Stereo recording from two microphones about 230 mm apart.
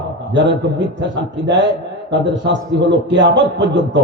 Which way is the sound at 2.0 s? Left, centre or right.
Right.